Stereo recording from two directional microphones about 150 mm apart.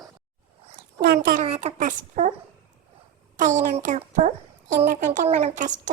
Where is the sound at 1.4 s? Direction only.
45° right (ahead or behind).